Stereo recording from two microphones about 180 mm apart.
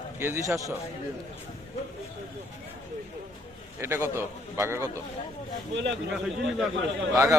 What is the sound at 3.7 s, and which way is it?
A man's voice, 15° right (ahead or behind).